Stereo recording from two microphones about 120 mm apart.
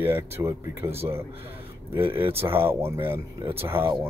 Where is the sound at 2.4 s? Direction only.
20° right (ahead or behind).